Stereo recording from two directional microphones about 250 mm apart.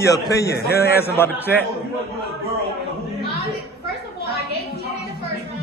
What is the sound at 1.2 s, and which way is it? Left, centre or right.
Speech, centre.